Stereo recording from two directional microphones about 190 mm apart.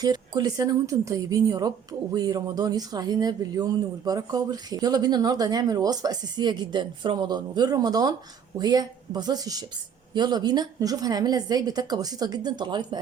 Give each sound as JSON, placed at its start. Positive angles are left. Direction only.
{"t": 0.0, "sound": "speech", "side_deg": -20}